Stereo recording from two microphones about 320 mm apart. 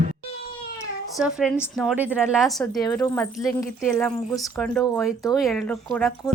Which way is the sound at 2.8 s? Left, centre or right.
Centre.